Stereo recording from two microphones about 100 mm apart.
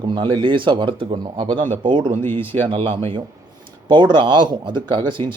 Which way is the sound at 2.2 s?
20° left (ahead or behind).